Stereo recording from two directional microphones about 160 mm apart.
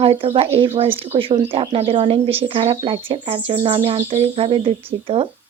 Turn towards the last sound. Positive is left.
turn(degrees=-35)  # may be behind; listen again after turning